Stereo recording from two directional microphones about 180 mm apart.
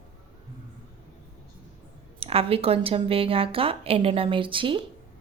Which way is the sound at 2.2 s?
30° right (ahead or behind).